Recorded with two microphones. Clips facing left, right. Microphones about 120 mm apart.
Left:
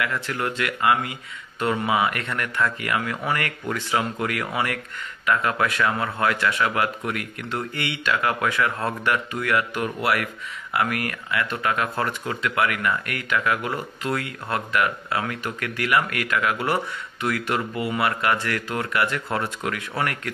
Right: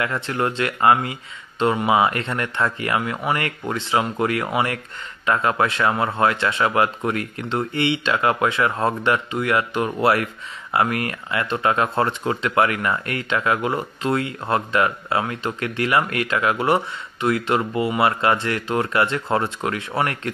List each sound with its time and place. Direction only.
0.0 s speech: 30° right (ahead or behind)